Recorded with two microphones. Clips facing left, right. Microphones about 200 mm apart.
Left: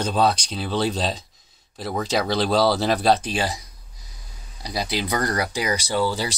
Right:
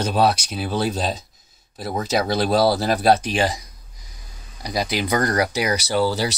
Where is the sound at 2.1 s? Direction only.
5° right (ahead or behind).